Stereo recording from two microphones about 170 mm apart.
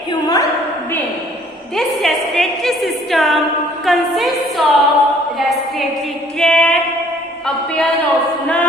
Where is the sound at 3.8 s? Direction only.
Centre (ahead or behind).